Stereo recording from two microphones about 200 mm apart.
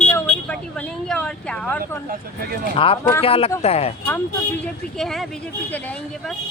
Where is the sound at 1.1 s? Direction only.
5° left (ahead or behind).